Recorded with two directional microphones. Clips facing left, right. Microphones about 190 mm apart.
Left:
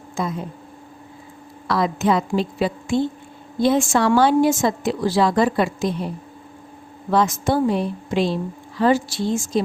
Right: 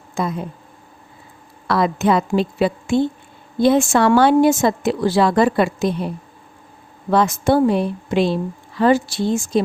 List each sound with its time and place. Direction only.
0.2 s speech: 60° right (ahead or behind)
1.6 s a woman's voice: 60° right (ahead or behind)
7.1 s a woman's voice: 65° right (ahead or behind)